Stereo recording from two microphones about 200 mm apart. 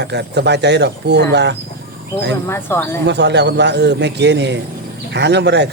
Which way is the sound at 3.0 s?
60° right (ahead or behind).